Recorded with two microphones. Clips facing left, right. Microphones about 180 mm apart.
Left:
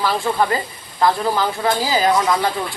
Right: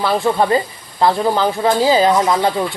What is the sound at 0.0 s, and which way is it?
Speech, 20° right (ahead or behind).